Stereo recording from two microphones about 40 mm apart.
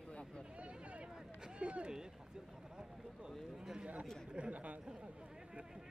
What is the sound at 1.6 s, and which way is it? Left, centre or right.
Speech, right.